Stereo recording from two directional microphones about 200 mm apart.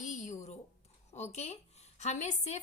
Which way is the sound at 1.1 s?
35° left (ahead or behind).